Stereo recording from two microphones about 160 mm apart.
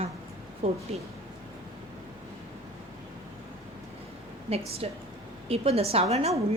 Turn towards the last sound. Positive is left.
turn(degrees=-40)  # may be behind; listen again after turning